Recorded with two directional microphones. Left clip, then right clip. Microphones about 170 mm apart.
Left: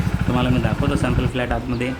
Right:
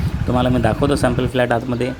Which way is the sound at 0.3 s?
35° right (ahead or behind).